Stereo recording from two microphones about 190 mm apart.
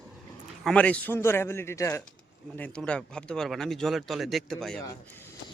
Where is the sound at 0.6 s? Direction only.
5° left (ahead or behind).